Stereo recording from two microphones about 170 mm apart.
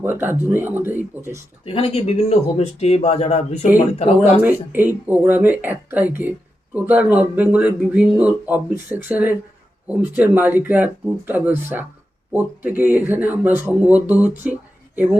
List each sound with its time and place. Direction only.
0.0 s speech: 15° right (ahead or behind)
1.6 s speech: 35° left (ahead or behind)
4.4 s speech: 10° right (ahead or behind)